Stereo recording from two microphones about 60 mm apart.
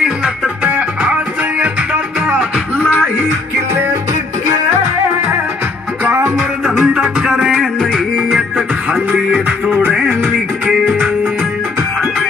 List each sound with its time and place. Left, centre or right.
0.7 s music: right
6.6 s music: centre
7.8 s music: centre
9.7 s music: right